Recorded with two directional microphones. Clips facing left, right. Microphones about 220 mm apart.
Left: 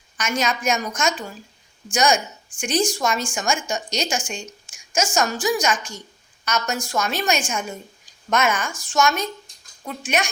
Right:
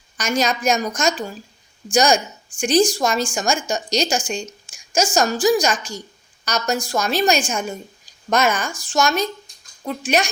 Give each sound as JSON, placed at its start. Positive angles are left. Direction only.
{"t": 0.2, "sound": "a woman's voice", "side_deg": -35}